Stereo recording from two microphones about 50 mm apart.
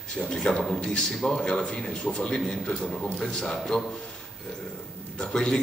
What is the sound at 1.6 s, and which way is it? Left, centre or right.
A man's voice, centre.